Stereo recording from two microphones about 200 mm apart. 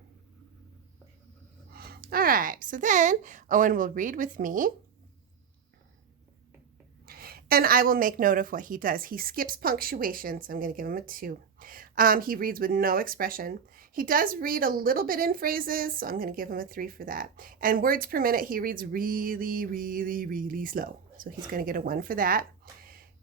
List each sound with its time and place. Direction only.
1.7 s speech: 50° right (ahead or behind)
7.0 s a woman's voice: 50° right (ahead or behind)
22.8 s a sound: 45° right (ahead or behind)